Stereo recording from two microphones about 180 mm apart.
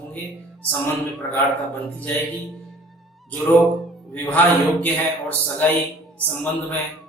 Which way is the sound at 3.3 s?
Centre (ahead or behind).